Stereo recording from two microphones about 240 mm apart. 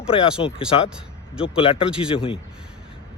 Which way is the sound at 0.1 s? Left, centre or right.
Left.